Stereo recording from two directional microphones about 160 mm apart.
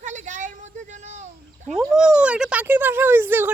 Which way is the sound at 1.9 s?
5° right (ahead or behind).